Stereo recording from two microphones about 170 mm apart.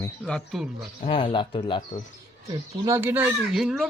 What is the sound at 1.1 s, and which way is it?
Speech, 30° left (ahead or behind).